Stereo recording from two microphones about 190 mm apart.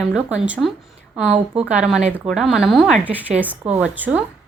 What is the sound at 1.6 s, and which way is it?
Speech, 5° right (ahead or behind).